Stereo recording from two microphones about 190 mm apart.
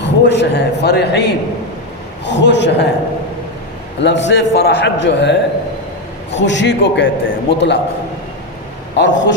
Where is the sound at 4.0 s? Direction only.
70° left (ahead or behind).